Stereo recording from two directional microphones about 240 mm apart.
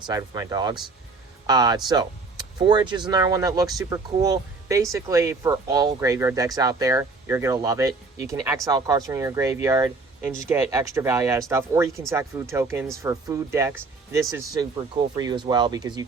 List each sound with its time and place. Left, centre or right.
0.0 s speech: centre